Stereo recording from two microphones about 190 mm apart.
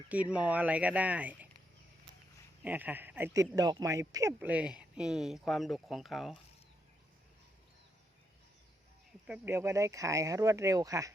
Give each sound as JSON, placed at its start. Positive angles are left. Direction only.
{"t": 0.1, "sound": "speech", "side_deg": -5}
{"t": 2.6, "sound": "speech", "side_deg": -10}
{"t": 9.2, "sound": "speech", "side_deg": -5}